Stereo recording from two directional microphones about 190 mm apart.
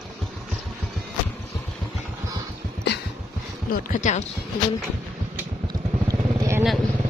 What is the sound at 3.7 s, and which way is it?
Speech, 45° left (ahead or behind).